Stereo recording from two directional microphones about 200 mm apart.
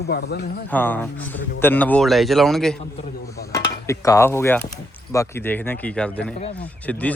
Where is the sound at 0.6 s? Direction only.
10° left (ahead or behind).